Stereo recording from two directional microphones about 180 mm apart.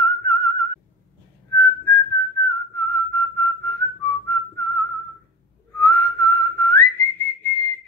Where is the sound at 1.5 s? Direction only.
10° left (ahead or behind).